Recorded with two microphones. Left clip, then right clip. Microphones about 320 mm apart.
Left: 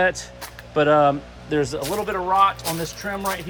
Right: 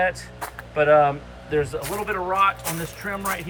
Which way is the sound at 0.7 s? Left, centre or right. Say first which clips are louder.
Even; centre.